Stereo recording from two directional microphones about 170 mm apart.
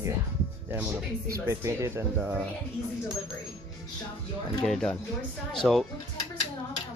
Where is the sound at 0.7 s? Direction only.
10° right (ahead or behind).